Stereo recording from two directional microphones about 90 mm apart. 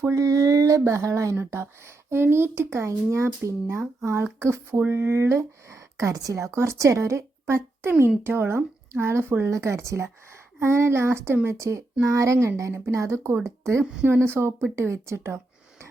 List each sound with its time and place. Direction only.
0.0 s speech: 35° right (ahead or behind)
13.8 s speech: 10° right (ahead or behind)
14.1 s speech: 25° right (ahead or behind)